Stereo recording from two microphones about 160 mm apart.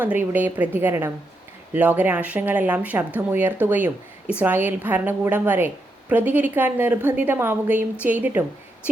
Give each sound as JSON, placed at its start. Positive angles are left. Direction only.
{"t": 0.0, "sound": "a woman's voice", "side_deg": -10}